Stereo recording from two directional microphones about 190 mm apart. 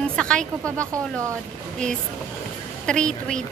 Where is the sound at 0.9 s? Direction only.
15° right (ahead or behind).